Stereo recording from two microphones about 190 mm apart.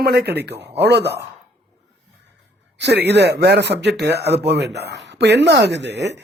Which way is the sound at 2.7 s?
65° right (ahead or behind).